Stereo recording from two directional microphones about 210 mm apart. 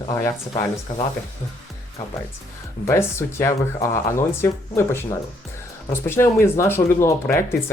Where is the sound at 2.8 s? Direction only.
10° left (ahead or behind).